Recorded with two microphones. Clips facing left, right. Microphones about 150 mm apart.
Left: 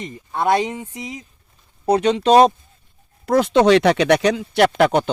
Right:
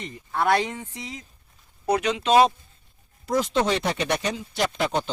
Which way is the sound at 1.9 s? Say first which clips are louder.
Left 6 dB; 35° left (ahead or behind).